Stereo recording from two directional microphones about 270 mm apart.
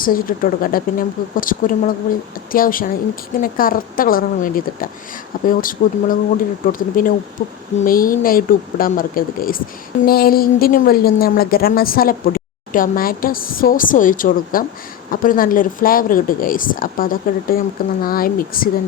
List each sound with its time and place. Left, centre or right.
0.0 s a woman's voice: left